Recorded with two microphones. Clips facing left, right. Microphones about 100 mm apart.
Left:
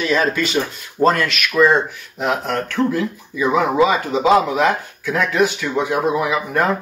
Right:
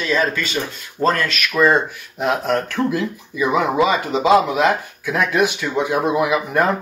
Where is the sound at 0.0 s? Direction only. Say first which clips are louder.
Left 2 dB; 5° left (ahead or behind).